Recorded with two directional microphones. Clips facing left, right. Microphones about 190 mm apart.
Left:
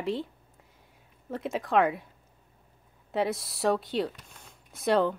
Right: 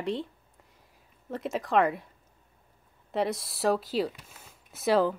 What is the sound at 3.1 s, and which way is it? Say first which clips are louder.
Speech: even; centre (ahead or behind).